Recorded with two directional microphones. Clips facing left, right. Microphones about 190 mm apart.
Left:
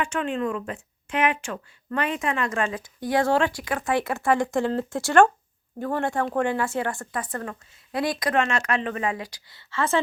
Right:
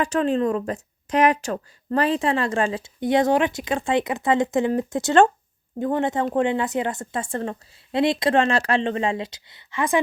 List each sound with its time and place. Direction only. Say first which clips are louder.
0.0 s speech: right 5 dB; 35° right (ahead or behind); by 10.0 s 15° right (ahead or behind)